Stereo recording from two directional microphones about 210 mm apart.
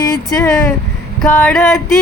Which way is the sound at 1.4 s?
10° left (ahead or behind).